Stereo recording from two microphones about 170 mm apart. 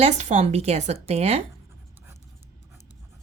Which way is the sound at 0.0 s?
40° right (ahead or behind).